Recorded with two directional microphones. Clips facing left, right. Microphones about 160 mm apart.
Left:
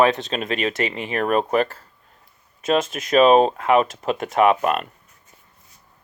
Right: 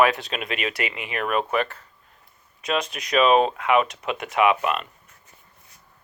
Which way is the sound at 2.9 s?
40° left (ahead or behind).